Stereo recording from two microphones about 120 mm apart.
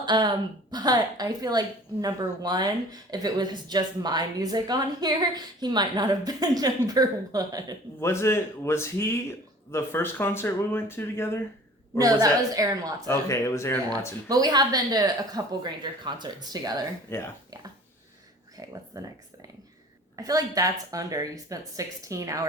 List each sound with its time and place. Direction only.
0.0 s a woman's voice: 35° right (ahead or behind)
8.0 s speech: 20° left (ahead or behind)
11.9 s a woman's voice: 30° right (ahead or behind)
13.1 s speech: 25° left (ahead or behind)
14.3 s a woman's voice: 35° right (ahead or behind)
17.1 s speech: 20° left (ahead or behind)
18.5 s speech: 30° right (ahead or behind)